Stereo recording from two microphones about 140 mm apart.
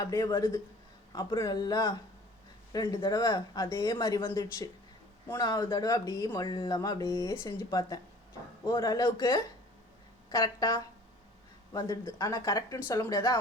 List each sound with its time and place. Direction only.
0.0 s speech: 25° left (ahead or behind)